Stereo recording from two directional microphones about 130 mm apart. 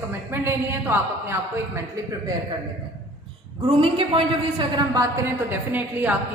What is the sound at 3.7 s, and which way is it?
Speech, 45° right (ahead or behind).